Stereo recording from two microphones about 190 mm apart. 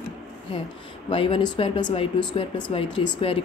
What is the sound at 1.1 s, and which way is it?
A woman's voice, 25° left (ahead or behind).